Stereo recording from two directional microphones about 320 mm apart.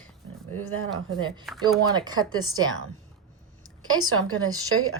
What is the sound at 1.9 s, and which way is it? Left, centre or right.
Speech, centre.